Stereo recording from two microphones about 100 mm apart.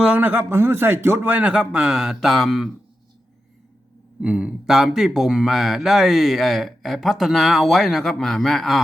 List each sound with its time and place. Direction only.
0.2 s speech: 20° right (ahead or behind); by 2.6 s centre (ahead or behind)
4.2 s speech: 10° right (ahead or behind)